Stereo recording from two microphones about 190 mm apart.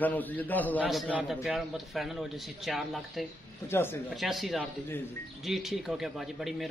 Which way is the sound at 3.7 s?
15° left (ahead or behind).